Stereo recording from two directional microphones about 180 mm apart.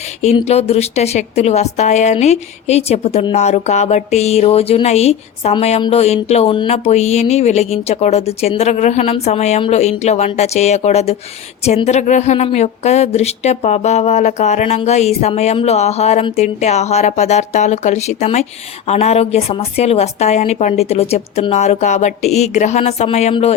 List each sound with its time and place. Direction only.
0.4 s a woman's voice: 35° left (ahead or behind)